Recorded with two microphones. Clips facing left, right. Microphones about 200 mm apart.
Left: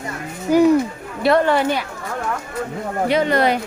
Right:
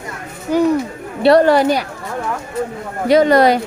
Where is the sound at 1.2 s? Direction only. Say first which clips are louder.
Right 5 dB; 35° right (ahead or behind).